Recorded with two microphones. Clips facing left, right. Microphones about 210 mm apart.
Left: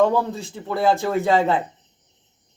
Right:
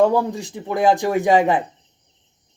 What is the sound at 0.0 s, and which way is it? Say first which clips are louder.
Speech: right 2 dB; 15° right (ahead or behind).